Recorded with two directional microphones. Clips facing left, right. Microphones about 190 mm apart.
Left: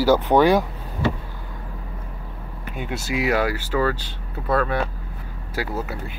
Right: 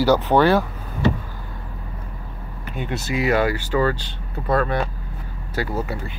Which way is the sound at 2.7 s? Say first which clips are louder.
Right 1 dB; 10° left (ahead or behind).